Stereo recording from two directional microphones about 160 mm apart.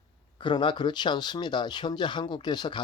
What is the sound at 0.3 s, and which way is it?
Speech, 30° left (ahead or behind).